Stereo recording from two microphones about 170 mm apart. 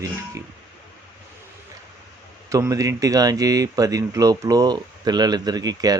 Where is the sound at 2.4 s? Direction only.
20° right (ahead or behind).